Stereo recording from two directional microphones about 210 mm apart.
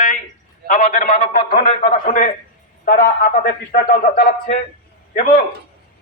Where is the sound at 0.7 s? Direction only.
35° left (ahead or behind).